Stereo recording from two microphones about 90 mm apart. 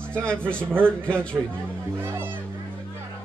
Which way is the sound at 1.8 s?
25° right (ahead or behind).